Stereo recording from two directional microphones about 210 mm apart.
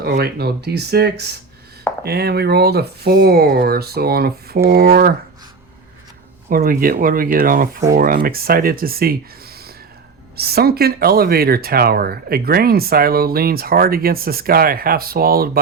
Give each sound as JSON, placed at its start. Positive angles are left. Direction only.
{"t": 0.2, "sound": "speech", "side_deg": -50}
{"t": 6.5, "sound": "speech", "side_deg": -45}
{"t": 10.3, "sound": "speech", "side_deg": -50}